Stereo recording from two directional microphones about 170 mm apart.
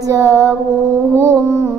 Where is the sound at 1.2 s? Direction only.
15° right (ahead or behind).